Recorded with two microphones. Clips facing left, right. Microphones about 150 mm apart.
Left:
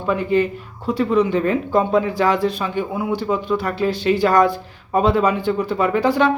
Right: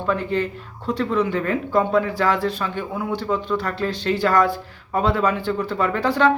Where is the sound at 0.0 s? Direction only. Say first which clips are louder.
Left 4 dB; 15° left (ahead or behind).